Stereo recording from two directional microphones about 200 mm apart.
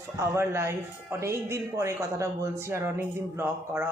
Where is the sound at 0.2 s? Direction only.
15° right (ahead or behind).